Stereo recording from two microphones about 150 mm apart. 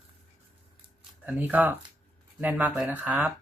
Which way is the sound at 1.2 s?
10° right (ahead or behind).